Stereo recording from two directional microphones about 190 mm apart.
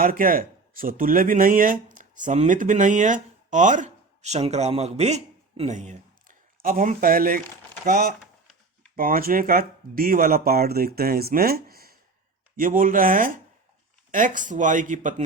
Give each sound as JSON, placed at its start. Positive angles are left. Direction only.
{"t": 0.0, "sound": "speech", "side_deg": -45}